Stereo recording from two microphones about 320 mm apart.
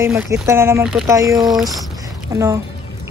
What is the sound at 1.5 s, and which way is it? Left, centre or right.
Speech, centre.